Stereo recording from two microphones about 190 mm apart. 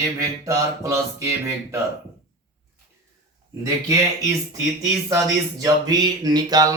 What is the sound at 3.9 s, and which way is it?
Mantra, 20° right (ahead or behind).